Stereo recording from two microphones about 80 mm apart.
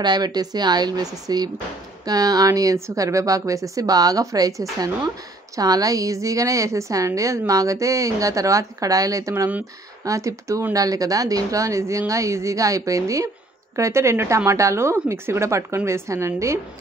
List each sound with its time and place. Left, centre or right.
0.0 s a woman's voice: right